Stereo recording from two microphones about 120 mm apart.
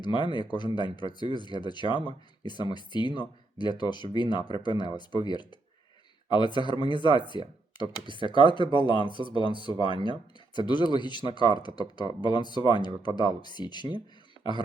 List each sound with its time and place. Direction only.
0.0 s speech: 40° left (ahead or behind)